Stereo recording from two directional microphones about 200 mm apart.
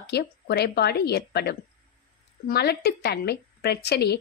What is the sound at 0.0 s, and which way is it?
A woman's voice, 55° left (ahead or behind).